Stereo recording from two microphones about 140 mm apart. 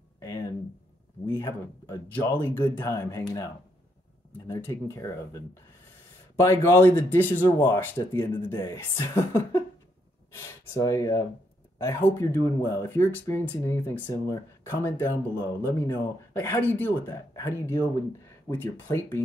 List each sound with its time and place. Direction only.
0.2 s a sound: 25° left (ahead or behind)
1.2 s speech: 30° left (ahead or behind)
2.1 s speech: 15° left (ahead or behind)
4.5 s speech: 20° left (ahead or behind)